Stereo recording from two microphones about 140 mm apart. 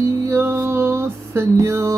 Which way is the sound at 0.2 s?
15° right (ahead or behind).